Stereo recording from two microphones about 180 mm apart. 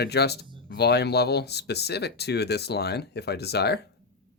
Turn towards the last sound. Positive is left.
turn(degrees=65)  # may be behind; listen again after turning